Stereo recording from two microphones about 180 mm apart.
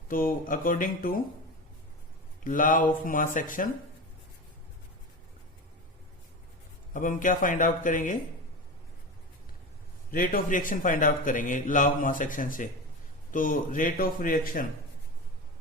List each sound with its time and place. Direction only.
0.1 s a man's voice: 50° left (ahead or behind)
2.4 s a man's voice: 45° left (ahead or behind)
6.9 s a man's voice: 45° left (ahead or behind)
10.1 s a man's voice: 50° left (ahead or behind)